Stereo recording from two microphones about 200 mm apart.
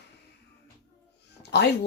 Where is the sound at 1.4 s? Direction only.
55° left (ahead or behind).